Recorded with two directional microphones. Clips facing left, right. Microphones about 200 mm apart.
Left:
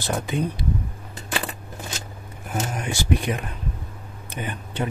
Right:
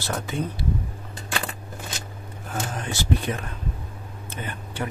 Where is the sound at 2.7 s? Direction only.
15° left (ahead or behind).